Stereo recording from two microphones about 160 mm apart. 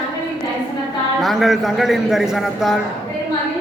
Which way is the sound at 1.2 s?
Centre (ahead or behind).